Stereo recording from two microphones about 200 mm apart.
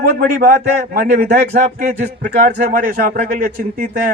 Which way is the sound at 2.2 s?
55° right (ahead or behind).